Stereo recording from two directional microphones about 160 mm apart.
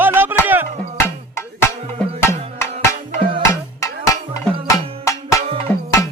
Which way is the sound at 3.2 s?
35° right (ahead or behind).